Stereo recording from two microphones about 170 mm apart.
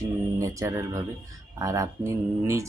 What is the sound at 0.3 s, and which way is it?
Speech, 20° right (ahead or behind).